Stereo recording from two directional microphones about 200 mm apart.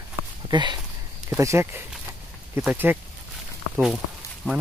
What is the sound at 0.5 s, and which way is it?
Speech, 20° right (ahead or behind).